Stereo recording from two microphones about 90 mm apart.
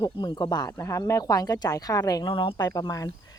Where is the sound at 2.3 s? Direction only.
70° left (ahead or behind).